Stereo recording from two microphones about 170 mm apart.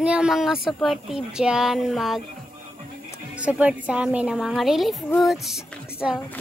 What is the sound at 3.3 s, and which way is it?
A child's voice, 5° right (ahead or behind).